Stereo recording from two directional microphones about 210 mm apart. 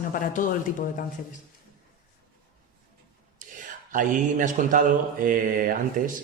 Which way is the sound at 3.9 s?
40° right (ahead or behind).